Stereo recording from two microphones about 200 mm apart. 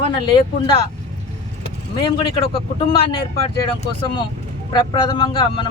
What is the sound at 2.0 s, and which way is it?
Speech, 25° left (ahead or behind).